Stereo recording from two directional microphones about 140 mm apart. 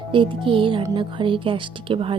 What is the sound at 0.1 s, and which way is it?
Speech, 40° right (ahead or behind).